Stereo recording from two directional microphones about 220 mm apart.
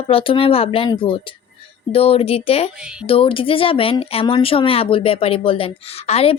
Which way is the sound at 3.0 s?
25° left (ahead or behind).